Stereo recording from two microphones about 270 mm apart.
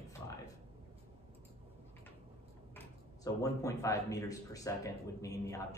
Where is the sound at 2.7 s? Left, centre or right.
Centre.